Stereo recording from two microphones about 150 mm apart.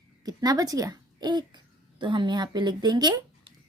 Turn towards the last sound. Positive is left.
turn(degrees=-30)  # may be behind; listen again after turning